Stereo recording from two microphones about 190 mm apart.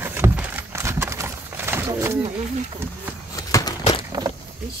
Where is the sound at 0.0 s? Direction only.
10° right (ahead or behind).